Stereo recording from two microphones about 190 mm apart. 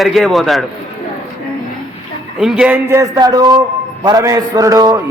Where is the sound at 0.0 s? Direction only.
Centre (ahead or behind).